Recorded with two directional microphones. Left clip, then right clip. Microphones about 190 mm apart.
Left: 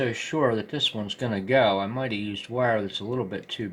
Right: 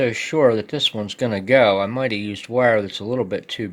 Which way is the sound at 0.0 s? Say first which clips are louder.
Right 8 dB; 55° right (ahead or behind).